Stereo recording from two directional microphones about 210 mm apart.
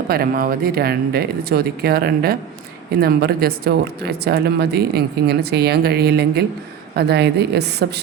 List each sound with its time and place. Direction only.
0.1 s speech: 45° right (ahead or behind)